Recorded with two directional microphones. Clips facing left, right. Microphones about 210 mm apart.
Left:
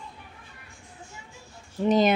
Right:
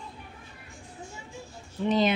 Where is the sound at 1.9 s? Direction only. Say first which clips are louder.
Left 3 dB; 45° left (ahead or behind).